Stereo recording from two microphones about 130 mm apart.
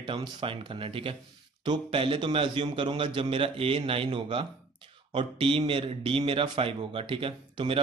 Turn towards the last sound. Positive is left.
turn(degrees=-45)  # may be behind; listen again after turning